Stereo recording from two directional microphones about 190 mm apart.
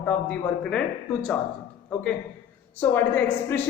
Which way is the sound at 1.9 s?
10° left (ahead or behind).